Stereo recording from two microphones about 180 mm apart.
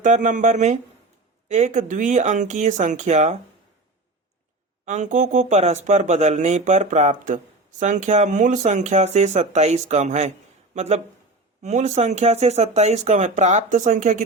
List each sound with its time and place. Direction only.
0.0 s speech: 45° right (ahead or behind)
4.9 s speech: 45° right (ahead or behind)